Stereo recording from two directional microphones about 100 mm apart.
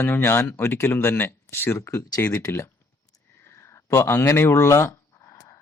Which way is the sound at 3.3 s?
25° left (ahead or behind).